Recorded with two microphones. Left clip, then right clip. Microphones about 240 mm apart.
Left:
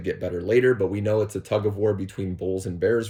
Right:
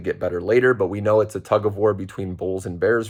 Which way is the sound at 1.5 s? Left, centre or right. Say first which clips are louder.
Right 4 dB; right.